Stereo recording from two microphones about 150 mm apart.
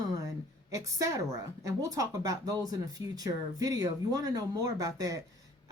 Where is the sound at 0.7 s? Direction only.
20° right (ahead or behind).